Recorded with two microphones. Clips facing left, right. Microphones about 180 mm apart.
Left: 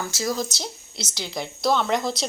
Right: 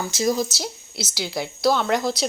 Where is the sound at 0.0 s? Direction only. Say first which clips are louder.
Right 4 dB; 20° right (ahead or behind).